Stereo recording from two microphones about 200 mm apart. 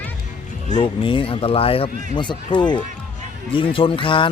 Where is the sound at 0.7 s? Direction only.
25° left (ahead or behind).